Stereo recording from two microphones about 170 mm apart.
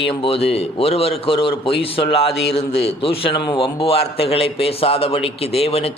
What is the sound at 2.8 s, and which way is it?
A man's voice, 35° left (ahead or behind).